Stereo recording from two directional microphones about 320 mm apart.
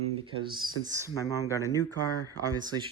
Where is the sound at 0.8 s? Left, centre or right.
Centre.